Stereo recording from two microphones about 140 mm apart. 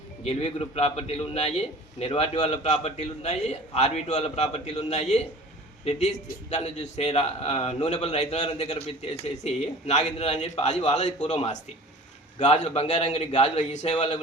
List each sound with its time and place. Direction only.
0.3 s a man's voice: 45° left (ahead or behind)